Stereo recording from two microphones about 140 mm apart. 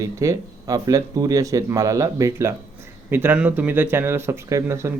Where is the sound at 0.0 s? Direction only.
25° right (ahead or behind).